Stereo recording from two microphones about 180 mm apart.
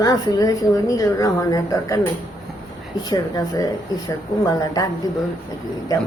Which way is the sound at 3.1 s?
20° left (ahead or behind).